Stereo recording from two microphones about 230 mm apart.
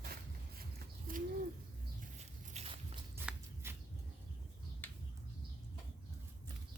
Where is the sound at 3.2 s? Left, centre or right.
Centre.